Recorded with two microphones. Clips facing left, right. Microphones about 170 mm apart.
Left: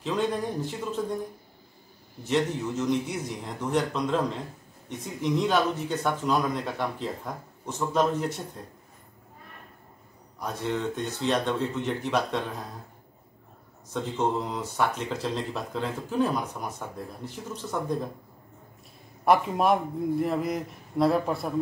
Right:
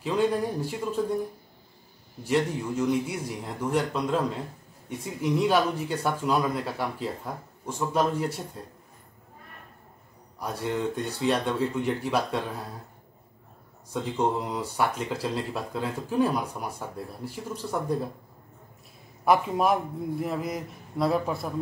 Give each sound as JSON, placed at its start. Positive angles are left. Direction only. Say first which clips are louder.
{"t": 0.0, "sound": "speech", "louder": "right 3 dB", "side_deg": -10}
{"t": 2.2, "sound": "speech", "louder": "even", "side_deg": -10}
{"t": 10.4, "sound": "speech", "louder": "right 1 dB", "side_deg": -10}
{"t": 13.9, "sound": "speech", "louder": "right 1 dB", "side_deg": -10}
{"t": 19.2, "sound": "a man's voice", "louder": "left 1 dB", "side_deg": 0}